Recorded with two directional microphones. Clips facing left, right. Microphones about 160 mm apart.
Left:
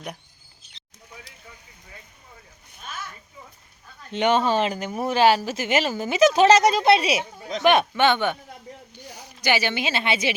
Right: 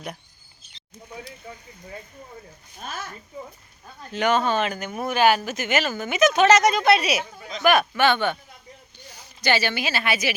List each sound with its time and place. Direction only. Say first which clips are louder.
2.8 s speech: right 3 dB; 40° right (ahead or behind)
4.1 s a woman's voice: left 1 dB; 25° left (ahead or behind)